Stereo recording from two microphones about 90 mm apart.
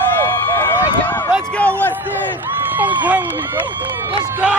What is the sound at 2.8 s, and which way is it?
Speech, 20° right (ahead or behind).